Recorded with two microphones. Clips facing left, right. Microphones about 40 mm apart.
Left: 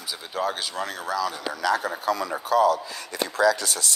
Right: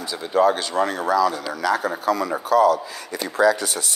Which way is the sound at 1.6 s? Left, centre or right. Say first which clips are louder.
Right 3 dB; right.